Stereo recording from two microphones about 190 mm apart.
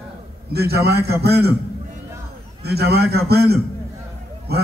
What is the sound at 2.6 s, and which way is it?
A man's voice, 60° right (ahead or behind).